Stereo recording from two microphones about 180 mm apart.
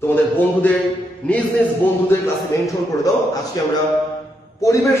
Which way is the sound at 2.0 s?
15° left (ahead or behind).